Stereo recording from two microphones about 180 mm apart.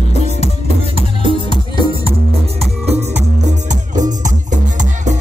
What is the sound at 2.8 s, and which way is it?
Music, 35° right (ahead or behind).